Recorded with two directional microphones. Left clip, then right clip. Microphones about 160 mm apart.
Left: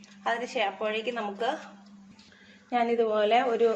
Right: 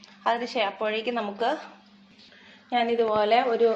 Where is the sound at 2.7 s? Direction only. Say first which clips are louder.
Right 2 dB; 10° left (ahead or behind).